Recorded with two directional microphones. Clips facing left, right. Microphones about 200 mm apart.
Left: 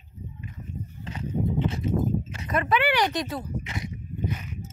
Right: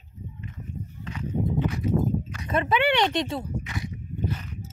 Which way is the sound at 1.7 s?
25° left (ahead or behind).